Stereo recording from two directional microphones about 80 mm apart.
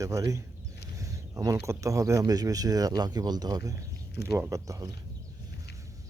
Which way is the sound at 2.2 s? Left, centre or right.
Right.